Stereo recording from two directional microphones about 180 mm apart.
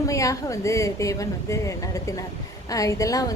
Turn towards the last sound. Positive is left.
turn(degrees=20)  # may be behind; listen again after turning